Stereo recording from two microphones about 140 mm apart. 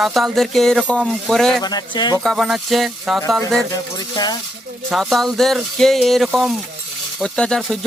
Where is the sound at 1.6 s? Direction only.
30° left (ahead or behind).